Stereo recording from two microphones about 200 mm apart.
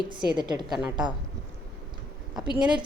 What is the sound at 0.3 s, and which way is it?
Speech, 20° right (ahead or behind).